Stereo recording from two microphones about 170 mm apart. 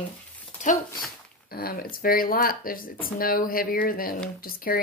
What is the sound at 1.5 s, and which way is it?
Speech, 60° left (ahead or behind).